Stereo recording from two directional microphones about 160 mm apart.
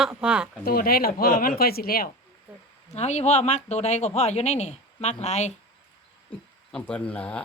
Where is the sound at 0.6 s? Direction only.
65° left (ahead or behind).